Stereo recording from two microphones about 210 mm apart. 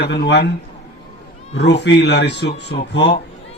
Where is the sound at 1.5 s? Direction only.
55° left (ahead or behind).